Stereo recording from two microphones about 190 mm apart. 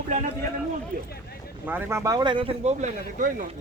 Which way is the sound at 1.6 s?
10° right (ahead or behind).